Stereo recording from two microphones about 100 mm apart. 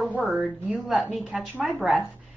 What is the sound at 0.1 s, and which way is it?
A woman's voice, 10° right (ahead or behind).